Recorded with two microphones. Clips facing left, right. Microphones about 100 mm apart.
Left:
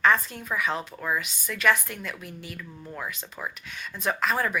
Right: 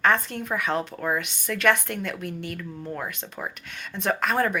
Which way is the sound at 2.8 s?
40° right (ahead or behind).